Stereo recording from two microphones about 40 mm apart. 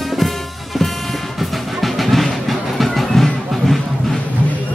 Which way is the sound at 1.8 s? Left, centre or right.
Centre.